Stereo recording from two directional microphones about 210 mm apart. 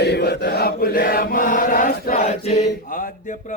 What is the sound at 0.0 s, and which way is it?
Chant, 50° left (ahead or behind).